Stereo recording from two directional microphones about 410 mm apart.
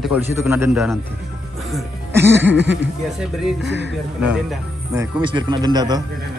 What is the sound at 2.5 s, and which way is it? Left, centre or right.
Speech, right.